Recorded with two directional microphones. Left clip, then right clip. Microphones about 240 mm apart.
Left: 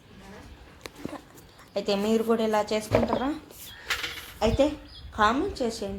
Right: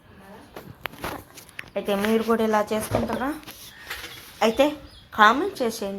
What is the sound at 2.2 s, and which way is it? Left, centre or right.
Speech, centre.